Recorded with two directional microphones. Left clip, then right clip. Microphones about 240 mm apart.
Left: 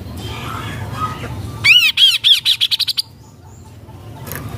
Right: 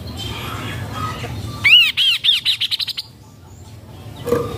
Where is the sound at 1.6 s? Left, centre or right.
Centre.